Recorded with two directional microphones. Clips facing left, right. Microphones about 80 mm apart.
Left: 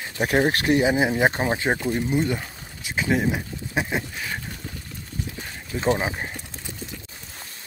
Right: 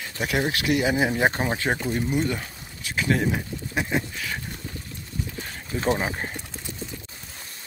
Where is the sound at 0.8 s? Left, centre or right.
Left.